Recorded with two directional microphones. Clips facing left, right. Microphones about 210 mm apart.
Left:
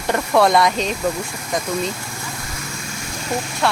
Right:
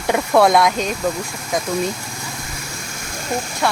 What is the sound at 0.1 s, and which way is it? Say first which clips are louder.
Speech: right 2 dB; centre (ahead or behind).